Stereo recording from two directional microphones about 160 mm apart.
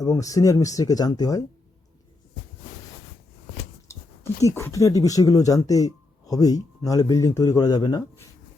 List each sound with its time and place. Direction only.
0.0 s speech: 20° left (ahead or behind)
3.8 s speech: 20° left (ahead or behind)